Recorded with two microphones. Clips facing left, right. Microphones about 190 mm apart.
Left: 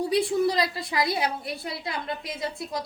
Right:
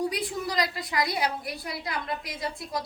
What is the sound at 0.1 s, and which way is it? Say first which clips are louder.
A woman's voice: left 8 dB; 25° left (ahead or behind).